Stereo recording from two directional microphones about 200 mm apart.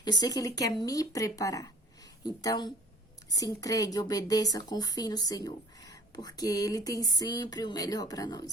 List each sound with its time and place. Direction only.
0.0 s a woman's voice: 20° left (ahead or behind)